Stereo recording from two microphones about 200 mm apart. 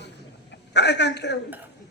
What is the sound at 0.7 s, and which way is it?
Speech, 60° left (ahead or behind).